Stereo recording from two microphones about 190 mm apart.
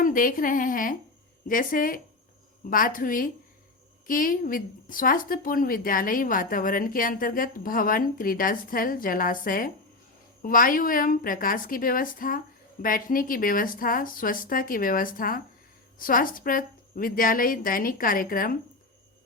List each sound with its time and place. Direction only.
0.0 s speech: 45° left (ahead or behind)